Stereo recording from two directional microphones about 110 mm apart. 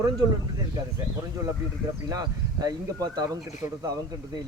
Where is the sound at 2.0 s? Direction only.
35° right (ahead or behind).